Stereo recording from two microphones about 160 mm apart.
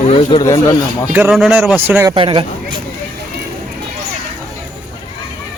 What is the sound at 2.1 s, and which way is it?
Speech, 35° right (ahead or behind).